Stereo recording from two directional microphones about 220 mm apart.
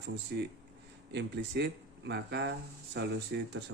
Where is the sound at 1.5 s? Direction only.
50° right (ahead or behind).